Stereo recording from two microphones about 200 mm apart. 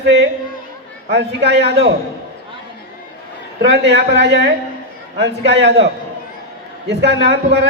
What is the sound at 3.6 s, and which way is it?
A man's voice, 55° right (ahead or behind).